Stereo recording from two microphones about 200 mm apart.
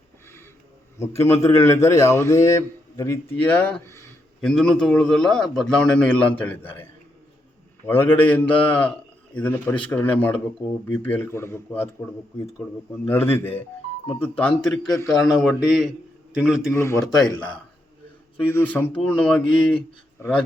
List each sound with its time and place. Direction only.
0.9 s a man's voice: 15° left (ahead or behind)
7.9 s a man's voice: 10° left (ahead or behind)
14.9 s a man's voice: 15° left (ahead or behind)
15.2 s a man's voice: centre (ahead or behind)
16.7 s a man's voice: 15° left (ahead or behind)
18.3 s a man's voice: 10° left (ahead or behind)